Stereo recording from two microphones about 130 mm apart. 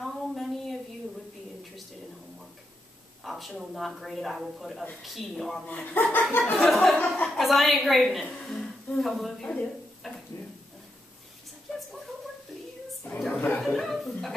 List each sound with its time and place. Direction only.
0.0 s a sound: centre (ahead or behind)
3.3 s speech: centre (ahead or behind)
6.3 s chuckle: 15° left (ahead or behind)
6.6 s a woman's voice: centre (ahead or behind)
13.0 s a sound: 10° left (ahead or behind)
13.7 s chuckle: centre (ahead or behind)